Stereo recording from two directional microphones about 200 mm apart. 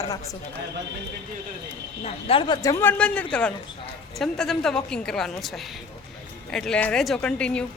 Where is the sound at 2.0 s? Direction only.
25° left (ahead or behind).